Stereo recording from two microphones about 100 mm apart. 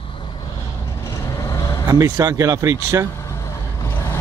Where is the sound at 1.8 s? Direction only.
35° right (ahead or behind).